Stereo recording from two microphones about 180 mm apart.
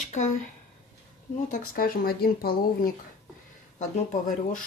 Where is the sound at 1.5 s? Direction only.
55° left (ahead or behind).